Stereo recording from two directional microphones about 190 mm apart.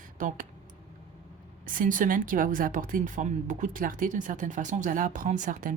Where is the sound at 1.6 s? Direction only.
45° right (ahead or behind).